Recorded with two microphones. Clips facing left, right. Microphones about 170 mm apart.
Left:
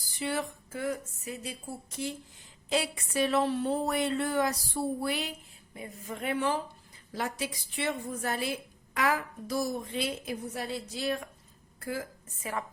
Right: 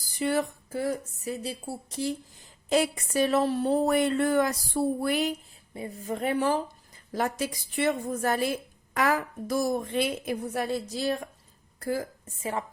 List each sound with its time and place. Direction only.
0.2 s a woman's voice: 45° right (ahead or behind)
5.7 s a woman's voice: 30° right (ahead or behind)
12.4 s a woman's voice: 25° right (ahead or behind)